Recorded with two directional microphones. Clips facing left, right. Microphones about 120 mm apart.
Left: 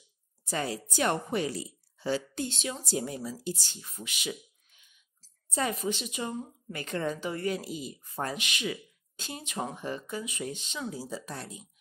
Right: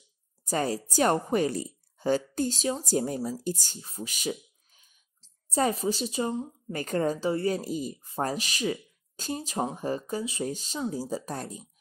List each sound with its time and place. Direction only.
0.5 s a woman's voice: 40° right (ahead or behind)